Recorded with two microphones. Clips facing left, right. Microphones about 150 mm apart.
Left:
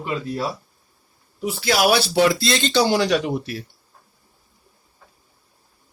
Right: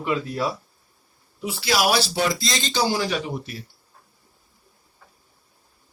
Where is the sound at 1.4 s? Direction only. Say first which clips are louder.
Left 3 dB; 50° left (ahead or behind); by 3.6 s 75° left (ahead or behind).